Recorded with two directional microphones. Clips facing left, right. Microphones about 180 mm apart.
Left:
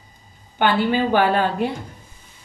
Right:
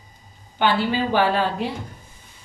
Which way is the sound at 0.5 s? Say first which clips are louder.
Left 2 dB; 55° left (ahead or behind).